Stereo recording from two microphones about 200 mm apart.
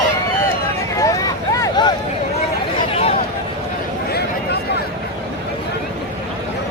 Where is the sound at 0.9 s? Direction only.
15° left (ahead or behind).